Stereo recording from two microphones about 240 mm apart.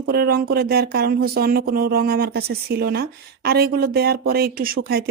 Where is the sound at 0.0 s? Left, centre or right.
Right.